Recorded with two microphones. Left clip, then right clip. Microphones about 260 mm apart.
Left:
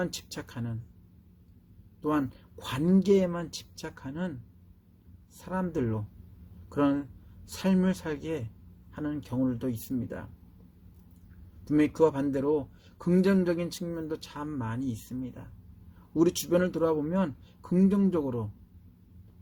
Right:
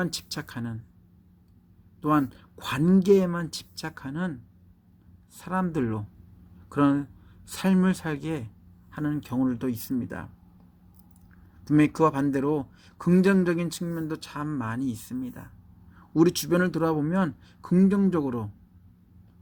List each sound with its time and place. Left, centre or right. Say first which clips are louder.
0.0 s speech: right 3 dB; right
2.0 s speech: right 5 dB; right
5.4 s speech: right 3 dB; right
11.6 s speech: right 2 dB; right